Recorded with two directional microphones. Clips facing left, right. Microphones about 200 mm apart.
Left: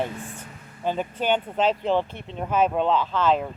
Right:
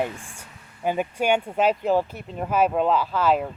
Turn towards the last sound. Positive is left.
turn(degrees=-5)  # may be behind; listen again after turning